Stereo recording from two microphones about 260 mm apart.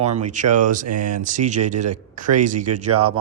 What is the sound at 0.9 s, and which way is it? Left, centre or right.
Speech, right.